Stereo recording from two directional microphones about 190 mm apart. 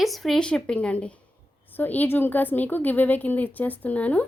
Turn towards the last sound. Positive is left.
turn(degrees=10)  # may be behind; listen again after turning